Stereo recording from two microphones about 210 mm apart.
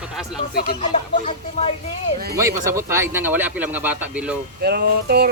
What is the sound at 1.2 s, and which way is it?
Speech, 30° left (ahead or behind).